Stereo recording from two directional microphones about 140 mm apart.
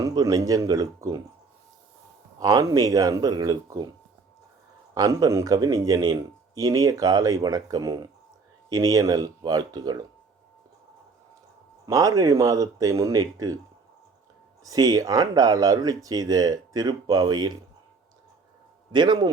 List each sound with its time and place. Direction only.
0.0 s speech: 25° right (ahead or behind)
2.4 s speech: 25° right (ahead or behind)
4.9 s speech: 25° right (ahead or behind)
11.9 s speech: 25° right (ahead or behind)
14.6 s speech: 25° right (ahead or behind)
18.9 s a man's voice: 35° right (ahead or behind)